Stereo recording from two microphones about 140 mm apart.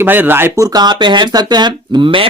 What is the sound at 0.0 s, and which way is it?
Speech, 15° right (ahead or behind).